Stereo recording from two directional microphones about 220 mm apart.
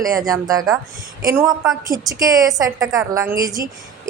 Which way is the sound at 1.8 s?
15° right (ahead or behind).